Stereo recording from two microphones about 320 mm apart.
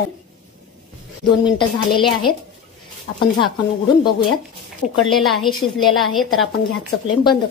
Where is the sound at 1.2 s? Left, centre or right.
Centre.